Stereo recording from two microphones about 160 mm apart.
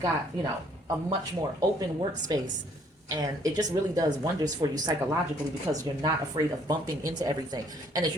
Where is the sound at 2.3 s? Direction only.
25° right (ahead or behind).